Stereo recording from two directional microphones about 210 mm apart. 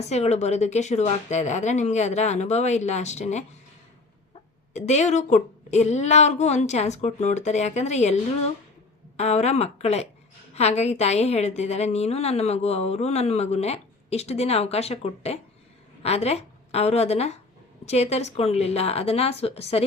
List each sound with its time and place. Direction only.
0.0 s a woman's voice: 30° left (ahead or behind)
4.7 s a woman's voice: 35° left (ahead or behind)